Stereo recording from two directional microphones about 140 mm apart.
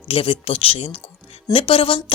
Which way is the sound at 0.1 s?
45° left (ahead or behind).